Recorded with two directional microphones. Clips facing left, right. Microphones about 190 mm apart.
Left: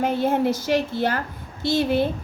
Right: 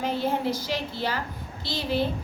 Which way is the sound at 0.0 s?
50° left (ahead or behind).